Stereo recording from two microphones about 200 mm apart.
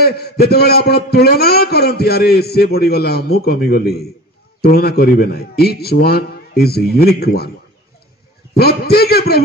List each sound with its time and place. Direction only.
0.0 s a man's voice: 50° left (ahead or behind)
8.5 s a man's voice: 50° left (ahead or behind)